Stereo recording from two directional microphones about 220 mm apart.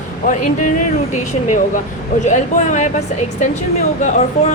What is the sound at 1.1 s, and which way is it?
Speech, 35° left (ahead or behind).